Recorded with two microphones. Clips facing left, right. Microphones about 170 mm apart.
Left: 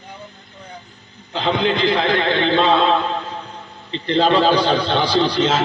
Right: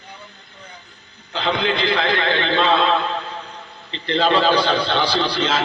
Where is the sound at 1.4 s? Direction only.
40° left (ahead or behind).